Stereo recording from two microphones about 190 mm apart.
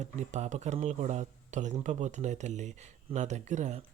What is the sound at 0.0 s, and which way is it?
Speech, 40° right (ahead or behind).